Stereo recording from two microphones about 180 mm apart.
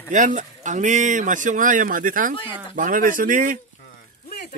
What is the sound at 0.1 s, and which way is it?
Speech, 45° right (ahead or behind).